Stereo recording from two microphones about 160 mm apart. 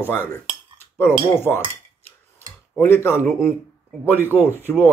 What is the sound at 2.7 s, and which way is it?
Speech, 15° left (ahead or behind).